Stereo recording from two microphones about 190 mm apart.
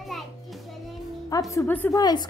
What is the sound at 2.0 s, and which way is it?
Speech, 20° left (ahead or behind).